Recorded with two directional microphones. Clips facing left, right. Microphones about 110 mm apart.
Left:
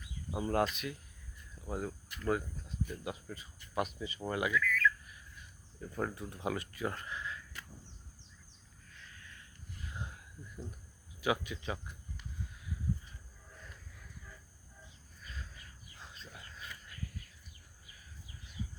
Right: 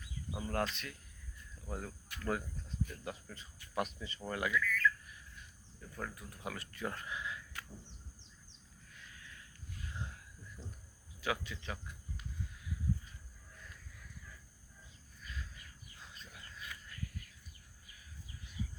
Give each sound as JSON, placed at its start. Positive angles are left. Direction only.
{"t": 0.3, "sound": "speech", "side_deg": 30}
{"t": 0.5, "sound": "speech", "side_deg": 15}
{"t": 4.5, "sound": "squawk", "side_deg": 0}
{"t": 5.8, "sound": "speech", "side_deg": 30}
{"t": 6.7, "sound": "speech", "side_deg": 5}
{"t": 7.1, "sound": "a sound", "side_deg": -10}
{"t": 9.2, "sound": "a sound", "side_deg": 0}
{"t": 11.2, "sound": "speech", "side_deg": 15}
{"t": 16.0, "sound": "a sound", "side_deg": 25}